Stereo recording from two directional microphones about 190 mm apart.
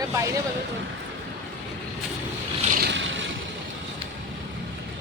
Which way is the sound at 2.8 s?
75° right (ahead or behind).